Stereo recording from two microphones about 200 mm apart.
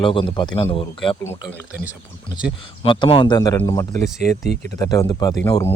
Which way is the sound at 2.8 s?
25° left (ahead or behind).